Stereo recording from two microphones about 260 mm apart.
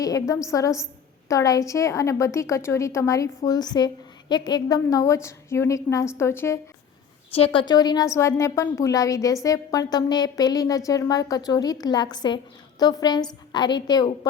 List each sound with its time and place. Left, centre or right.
0.0 s a woman's voice: centre
7.3 s a woman's voice: left